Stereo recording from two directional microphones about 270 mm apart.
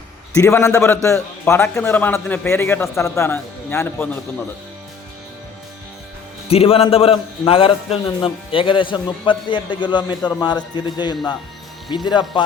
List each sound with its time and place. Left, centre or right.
0.3 s a man's voice: centre
6.5 s a man's voice: left